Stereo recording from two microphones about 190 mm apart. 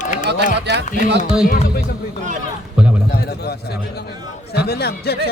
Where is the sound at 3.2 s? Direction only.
60° left (ahead or behind).